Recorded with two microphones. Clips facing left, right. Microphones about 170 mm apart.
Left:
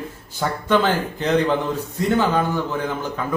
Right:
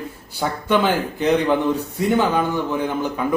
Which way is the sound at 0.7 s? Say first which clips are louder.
Even; 15° right (ahead or behind).